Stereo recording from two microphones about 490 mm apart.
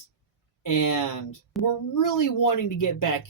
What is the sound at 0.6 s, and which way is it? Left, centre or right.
Speech, left.